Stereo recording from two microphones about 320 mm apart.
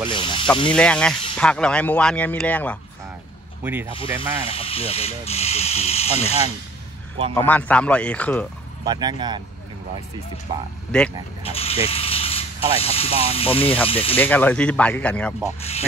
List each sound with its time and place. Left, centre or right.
0.1 s speech: centre
0.7 s speech: centre
3.9 s speech: centre
7.3 s speech: centre
8.8 s speech: centre
10.9 s speech: centre
11.4 s speech: centre
14.1 s speech: centre